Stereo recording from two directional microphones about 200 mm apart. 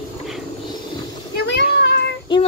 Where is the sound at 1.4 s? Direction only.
60° left (ahead or behind).